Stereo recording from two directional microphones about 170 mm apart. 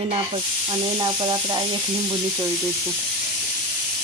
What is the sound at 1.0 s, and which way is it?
Speech, 25° right (ahead or behind).